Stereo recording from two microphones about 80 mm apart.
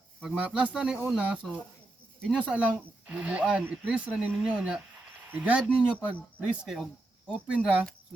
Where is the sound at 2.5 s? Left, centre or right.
Centre.